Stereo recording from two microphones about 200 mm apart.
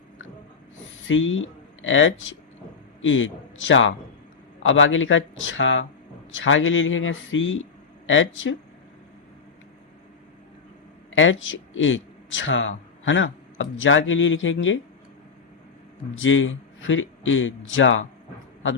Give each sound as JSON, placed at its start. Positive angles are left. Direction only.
{"t": 1.0, "sound": "a man's voice", "side_deg": 75}
{"t": 11.1, "sound": "speech", "side_deg": 75}
{"t": 16.1, "sound": "a man's voice", "side_deg": 75}